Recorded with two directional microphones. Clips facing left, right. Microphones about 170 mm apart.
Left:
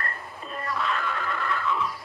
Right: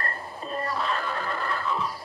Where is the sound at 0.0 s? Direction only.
35° right (ahead or behind).